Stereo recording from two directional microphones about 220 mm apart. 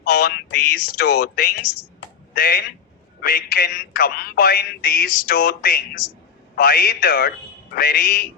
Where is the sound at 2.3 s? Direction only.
45° left (ahead or behind).